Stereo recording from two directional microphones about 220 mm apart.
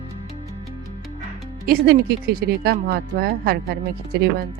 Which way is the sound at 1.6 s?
45° right (ahead or behind).